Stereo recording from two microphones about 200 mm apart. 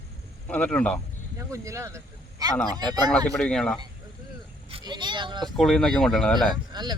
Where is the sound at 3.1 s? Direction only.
5° left (ahead or behind).